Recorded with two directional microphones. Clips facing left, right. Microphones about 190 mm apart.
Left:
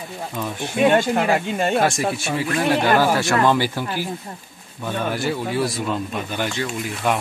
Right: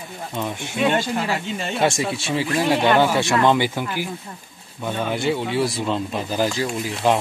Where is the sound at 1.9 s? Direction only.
25° right (ahead or behind).